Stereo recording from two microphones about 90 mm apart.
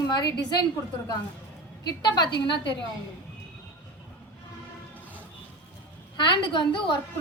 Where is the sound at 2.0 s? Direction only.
55° left (ahead or behind).